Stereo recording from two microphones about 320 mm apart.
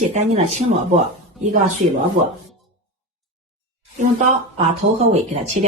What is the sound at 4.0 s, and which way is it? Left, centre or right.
Speech, right.